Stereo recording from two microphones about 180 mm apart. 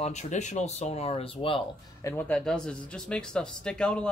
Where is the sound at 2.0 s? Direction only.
10° left (ahead or behind).